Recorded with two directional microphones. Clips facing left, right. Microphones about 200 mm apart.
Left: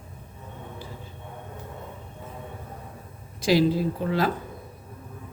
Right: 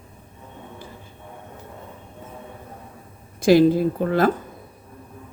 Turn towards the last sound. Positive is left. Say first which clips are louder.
# right 6 dB
turn(degrees=-50)  # may be behind; listen again after turning